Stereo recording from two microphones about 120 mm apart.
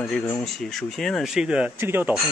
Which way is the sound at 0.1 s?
5° left (ahead or behind).